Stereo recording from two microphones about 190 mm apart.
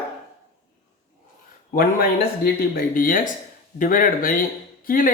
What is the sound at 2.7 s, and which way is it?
Speech, 45° left (ahead or behind).